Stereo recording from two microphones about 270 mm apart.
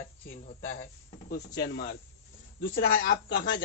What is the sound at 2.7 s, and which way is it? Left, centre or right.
Speech, left.